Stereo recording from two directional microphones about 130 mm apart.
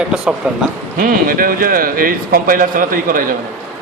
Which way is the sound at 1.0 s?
90° right.